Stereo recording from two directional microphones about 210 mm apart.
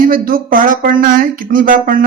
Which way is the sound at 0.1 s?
40° right (ahead or behind).